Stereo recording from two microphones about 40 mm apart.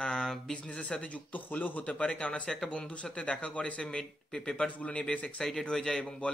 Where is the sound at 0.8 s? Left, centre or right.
Left.